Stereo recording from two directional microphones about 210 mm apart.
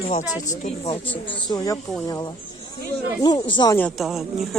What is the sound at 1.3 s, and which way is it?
Speech, 20° left (ahead or behind).